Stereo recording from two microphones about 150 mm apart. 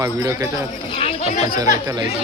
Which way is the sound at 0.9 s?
45° left (ahead or behind).